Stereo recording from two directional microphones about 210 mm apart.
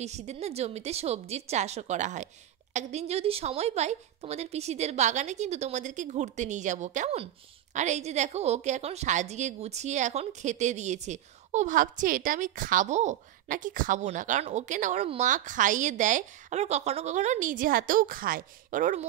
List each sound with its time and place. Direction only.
0.0 s a woman's voice: 30° right (ahead or behind)